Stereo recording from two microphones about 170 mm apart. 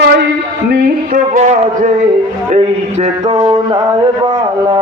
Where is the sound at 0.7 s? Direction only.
55° right (ahead or behind).